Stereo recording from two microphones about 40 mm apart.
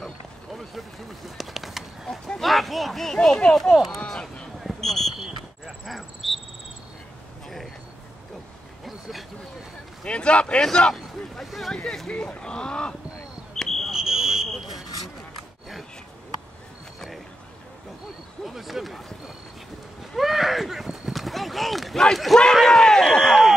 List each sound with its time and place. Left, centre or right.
0.5 s a sound: centre
2.4 s speech: centre
4.0 s a sound: centre
4.7 s basketball bounce: centre
5.9 s cricket: centre
7.4 s vehicle: centre
10.0 s a man's voice: left
12.1 s speech: left
13.6 s smoke detector: centre
13.9 s fire alarm: centre
18.4 s a sound: centre
21.9 s speech: centre